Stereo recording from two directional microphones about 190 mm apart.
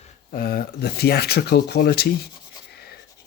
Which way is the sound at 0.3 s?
50° left (ahead or behind).